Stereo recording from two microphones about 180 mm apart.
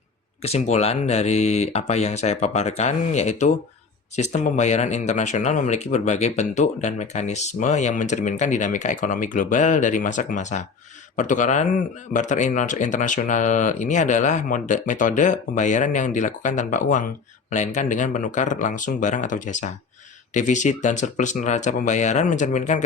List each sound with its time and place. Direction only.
0.4 s speech: 35° left (ahead or behind)